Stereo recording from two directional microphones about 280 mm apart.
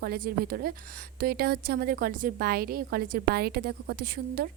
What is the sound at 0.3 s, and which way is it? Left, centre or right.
A woman's voice, right.